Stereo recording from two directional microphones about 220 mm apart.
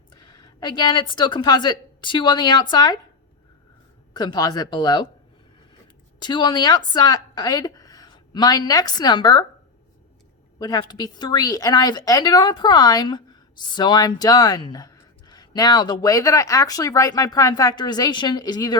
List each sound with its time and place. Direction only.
0.1 s a woman's voice: 20° left (ahead or behind)
4.1 s speech: 20° left (ahead or behind)
6.1 s a woman's voice: 20° left (ahead or behind)
10.6 s a woman's voice: 20° left (ahead or behind)